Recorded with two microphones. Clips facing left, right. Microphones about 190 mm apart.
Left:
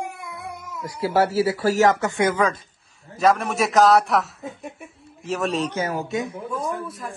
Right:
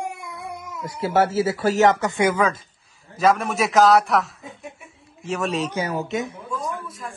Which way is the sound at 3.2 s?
Centre (ahead or behind).